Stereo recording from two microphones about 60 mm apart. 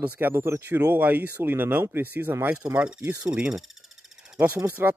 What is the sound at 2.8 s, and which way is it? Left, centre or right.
Speech, right.